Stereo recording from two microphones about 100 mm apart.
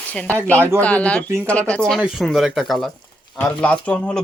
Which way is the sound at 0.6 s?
25° right (ahead or behind).